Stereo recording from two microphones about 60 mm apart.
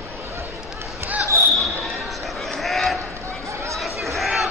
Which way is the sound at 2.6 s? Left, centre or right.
Centre.